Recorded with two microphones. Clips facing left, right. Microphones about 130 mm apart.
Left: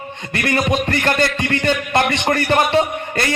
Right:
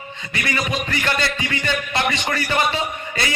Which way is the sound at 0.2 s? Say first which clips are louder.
Left 5 dB; 50° left (ahead or behind).